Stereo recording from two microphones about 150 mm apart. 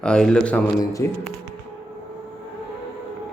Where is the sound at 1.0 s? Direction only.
15° left (ahead or behind).